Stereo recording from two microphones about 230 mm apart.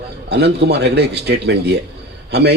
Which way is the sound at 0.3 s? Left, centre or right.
Right.